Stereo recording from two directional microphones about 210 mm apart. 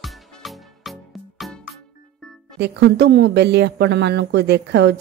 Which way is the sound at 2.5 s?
55° right (ahead or behind).